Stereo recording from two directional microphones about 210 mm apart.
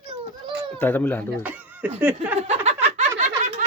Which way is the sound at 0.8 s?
10° left (ahead or behind).